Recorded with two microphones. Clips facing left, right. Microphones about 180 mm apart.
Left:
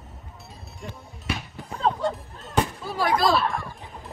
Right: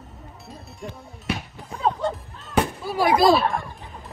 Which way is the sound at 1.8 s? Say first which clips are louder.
Right 1 dB; centre (ahead or behind).